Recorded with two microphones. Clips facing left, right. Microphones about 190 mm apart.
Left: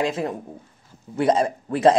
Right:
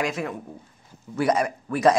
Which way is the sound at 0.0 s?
30° left (ahead or behind).